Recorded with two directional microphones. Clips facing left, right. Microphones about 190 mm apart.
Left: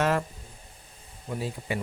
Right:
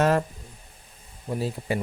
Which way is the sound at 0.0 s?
40° right (ahead or behind).